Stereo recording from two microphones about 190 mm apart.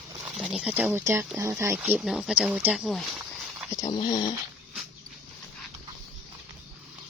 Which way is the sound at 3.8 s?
20° left (ahead or behind).